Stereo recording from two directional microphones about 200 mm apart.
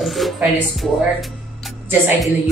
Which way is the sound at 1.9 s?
10° right (ahead or behind).